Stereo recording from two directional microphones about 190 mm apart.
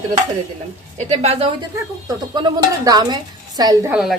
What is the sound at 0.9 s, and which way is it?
Speech, 35° right (ahead or behind).